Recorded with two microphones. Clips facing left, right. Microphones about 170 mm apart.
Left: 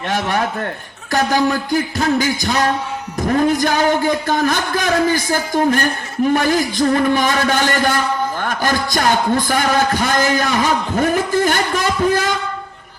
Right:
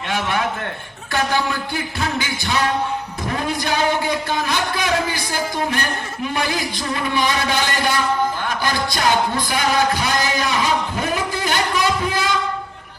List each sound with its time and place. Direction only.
0.1 s music: 40° left (ahead or behind)